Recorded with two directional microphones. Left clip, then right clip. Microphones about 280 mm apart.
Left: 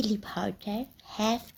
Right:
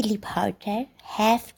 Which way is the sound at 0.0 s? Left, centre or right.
Right.